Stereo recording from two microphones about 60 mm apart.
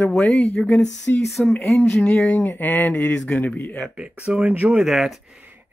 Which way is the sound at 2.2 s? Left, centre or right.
Left.